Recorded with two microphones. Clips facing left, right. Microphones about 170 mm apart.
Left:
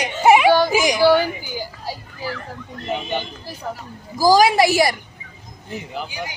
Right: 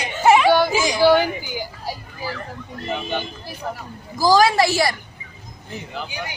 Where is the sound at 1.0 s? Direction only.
15° right (ahead or behind).